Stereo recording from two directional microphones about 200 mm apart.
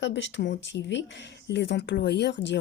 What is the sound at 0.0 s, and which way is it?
A woman's voice, 65° left (ahead or behind).